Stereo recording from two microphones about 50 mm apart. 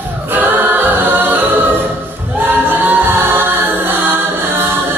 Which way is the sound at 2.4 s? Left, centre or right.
Right.